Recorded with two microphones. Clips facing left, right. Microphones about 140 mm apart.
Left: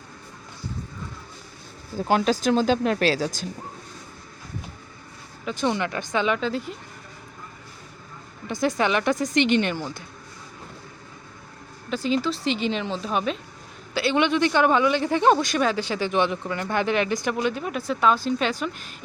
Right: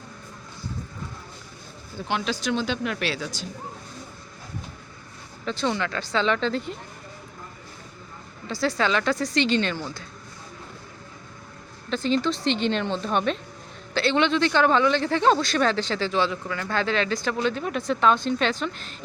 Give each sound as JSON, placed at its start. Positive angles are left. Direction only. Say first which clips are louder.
{"t": 2.0, "sound": "speech", "louder": "left 6 dB", "side_deg": 40}
{"t": 5.5, "sound": "speech", "louder": "left 1 dB", "side_deg": 15}
{"t": 8.4, "sound": "speech", "louder": "left 1 dB", "side_deg": 20}
{"t": 11.9, "sound": "a woman's voice", "louder": "even", "side_deg": 10}